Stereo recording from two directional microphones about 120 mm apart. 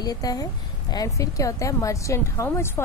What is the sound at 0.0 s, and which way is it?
Speech, 30° left (ahead or behind).